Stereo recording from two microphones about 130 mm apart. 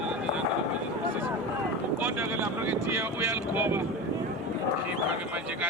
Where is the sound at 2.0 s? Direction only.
15° right (ahead or behind).